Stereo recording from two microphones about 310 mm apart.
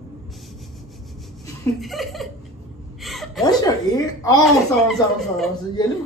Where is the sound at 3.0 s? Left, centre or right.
Centre.